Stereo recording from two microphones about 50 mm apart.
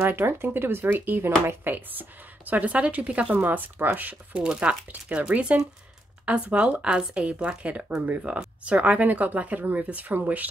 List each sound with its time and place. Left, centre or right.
0.0 s speech: right
3.4 s speech: right